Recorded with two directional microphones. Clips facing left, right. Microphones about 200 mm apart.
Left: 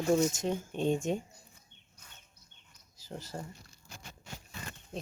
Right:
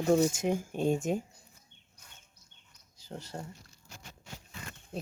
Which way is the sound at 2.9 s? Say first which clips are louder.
Even; 5° left (ahead or behind).